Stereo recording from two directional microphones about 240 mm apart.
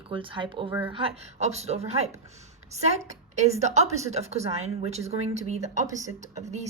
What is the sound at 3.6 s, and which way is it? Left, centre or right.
A woman's voice, right.